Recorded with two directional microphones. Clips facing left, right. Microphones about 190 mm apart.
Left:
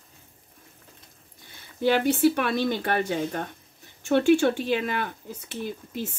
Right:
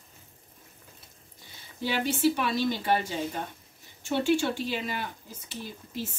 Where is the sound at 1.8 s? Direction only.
60° left (ahead or behind).